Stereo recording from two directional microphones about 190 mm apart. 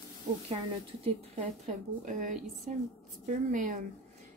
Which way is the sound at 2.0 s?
40° right (ahead or behind).